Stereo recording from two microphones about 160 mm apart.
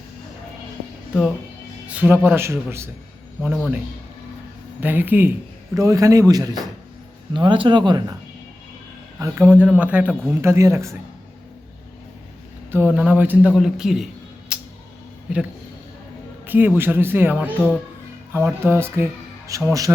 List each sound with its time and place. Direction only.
1.9 s a man's voice: 10° right (ahead or behind)
4.8 s a man's voice: 10° right (ahead or behind); by 8.1 s 25° right (ahead or behind)
9.1 s a man's voice: 15° right (ahead or behind)
12.7 s a man's voice: 10° right (ahead or behind)
14.5 s music: 5° right (ahead or behind)
16.5 s a man's voice: 10° right (ahead or behind)